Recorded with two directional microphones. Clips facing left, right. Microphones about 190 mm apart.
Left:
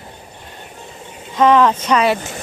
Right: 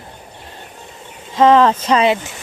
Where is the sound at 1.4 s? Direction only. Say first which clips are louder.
Right 2 dB; 30° right (ahead or behind).